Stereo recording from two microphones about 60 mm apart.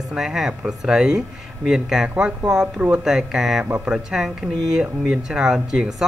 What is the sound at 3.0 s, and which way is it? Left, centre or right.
Speech, centre.